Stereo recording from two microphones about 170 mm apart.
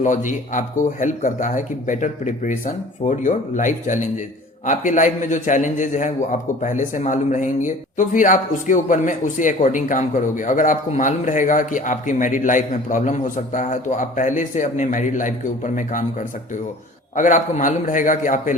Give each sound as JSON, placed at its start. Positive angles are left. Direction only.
{"t": 0.0, "sound": "a man's voice", "side_deg": 45}
{"t": 17.2, "sound": "a man's voice", "side_deg": 50}